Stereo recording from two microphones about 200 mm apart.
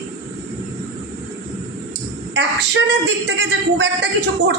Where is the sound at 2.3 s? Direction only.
60° right (ahead or behind).